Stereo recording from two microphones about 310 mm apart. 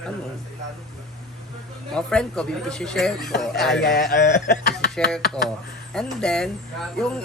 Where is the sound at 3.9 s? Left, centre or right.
Left.